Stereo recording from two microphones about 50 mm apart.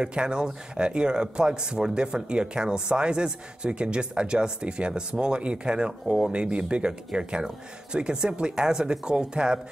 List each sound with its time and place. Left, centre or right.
0.0 s speech: centre